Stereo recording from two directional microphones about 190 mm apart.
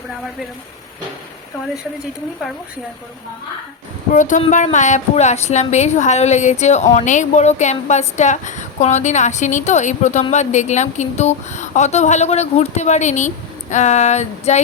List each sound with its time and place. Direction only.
4.1 s a woman's voice: 40° left (ahead or behind)